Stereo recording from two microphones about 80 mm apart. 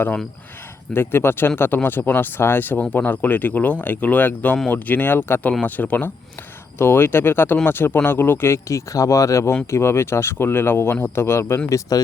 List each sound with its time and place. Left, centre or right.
0.9 s speech: left